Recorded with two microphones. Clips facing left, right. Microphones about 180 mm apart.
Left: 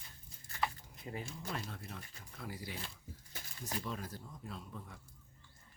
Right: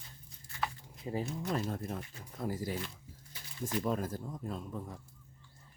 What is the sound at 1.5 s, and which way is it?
Speech, 45° right (ahead or behind).